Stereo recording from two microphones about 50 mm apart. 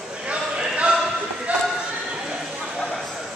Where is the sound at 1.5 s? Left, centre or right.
Right.